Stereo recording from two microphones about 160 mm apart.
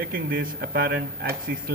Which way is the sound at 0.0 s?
65° right (ahead or behind).